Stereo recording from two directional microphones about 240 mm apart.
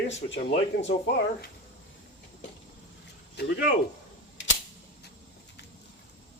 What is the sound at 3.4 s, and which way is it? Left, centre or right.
Speech, left.